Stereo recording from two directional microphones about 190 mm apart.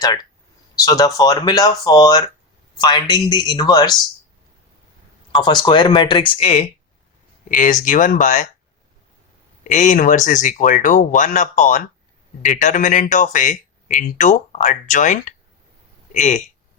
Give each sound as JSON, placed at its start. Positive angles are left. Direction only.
{"t": 0.0, "sound": "speech", "side_deg": 20}
{"t": 5.4, "sound": "speech", "side_deg": 25}
{"t": 7.4, "sound": "speech", "side_deg": 45}
{"t": 9.6, "sound": "speech", "side_deg": 40}